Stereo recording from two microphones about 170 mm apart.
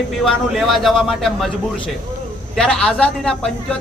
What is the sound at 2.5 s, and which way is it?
Speech, 5° left (ahead or behind).